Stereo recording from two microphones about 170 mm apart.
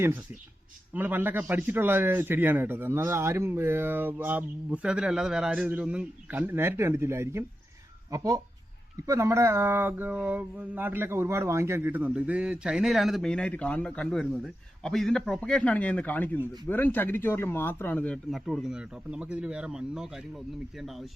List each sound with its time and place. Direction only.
0.9 s a man's voice: 10° right (ahead or behind)